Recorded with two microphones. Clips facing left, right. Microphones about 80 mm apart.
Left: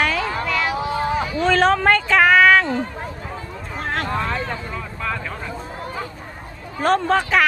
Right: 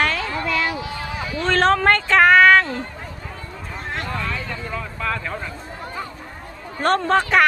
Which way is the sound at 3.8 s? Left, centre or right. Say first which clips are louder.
Left 5 dB; left.